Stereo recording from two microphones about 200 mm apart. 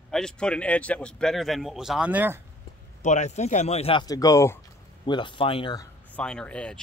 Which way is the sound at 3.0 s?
35° left (ahead or behind).